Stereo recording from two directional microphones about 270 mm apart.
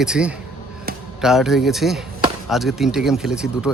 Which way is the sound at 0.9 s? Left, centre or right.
Right.